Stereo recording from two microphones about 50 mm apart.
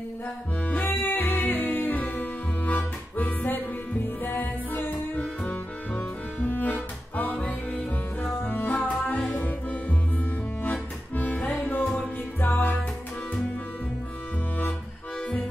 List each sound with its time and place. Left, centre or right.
0.7 s music: left
9.4 s accordion: left
12.4 s music: left